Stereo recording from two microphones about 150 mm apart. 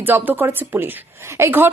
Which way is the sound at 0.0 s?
15° right (ahead or behind).